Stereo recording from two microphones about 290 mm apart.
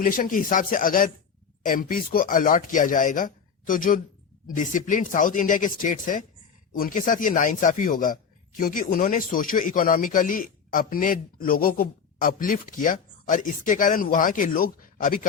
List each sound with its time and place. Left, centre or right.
0.0 s speech: left